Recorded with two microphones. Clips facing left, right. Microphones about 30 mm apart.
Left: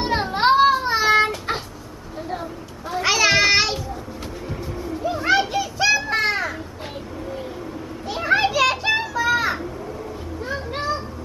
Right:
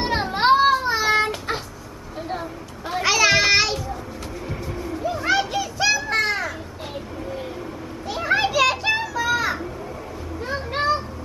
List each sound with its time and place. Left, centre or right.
0.0 s child singing: centre
3.0 s children playing: centre
4.5 s vehicle: centre
5.0 s a sound: centre
6.0 s children playing: centre
8.1 s children playing: centre
9.0 s children playing: centre
10.4 s children playing: centre